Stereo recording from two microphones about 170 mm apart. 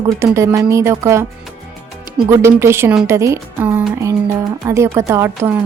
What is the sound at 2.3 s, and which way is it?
Speech, 15° right (ahead or behind).